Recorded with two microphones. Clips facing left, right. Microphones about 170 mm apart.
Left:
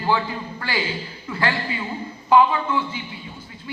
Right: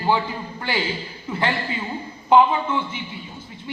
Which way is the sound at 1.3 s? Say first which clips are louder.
Even; 25° right (ahead or behind).